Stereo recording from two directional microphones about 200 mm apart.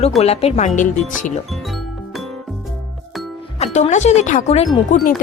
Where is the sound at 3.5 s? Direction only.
35° left (ahead or behind).